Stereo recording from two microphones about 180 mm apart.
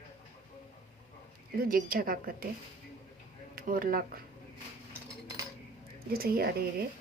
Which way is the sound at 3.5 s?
50° right (ahead or behind).